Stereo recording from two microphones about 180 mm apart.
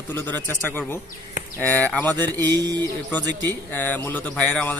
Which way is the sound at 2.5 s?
20° right (ahead or behind).